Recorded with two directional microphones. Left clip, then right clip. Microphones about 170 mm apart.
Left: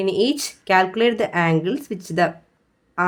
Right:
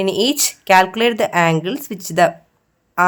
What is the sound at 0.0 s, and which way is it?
Speech, 20° right (ahead or behind).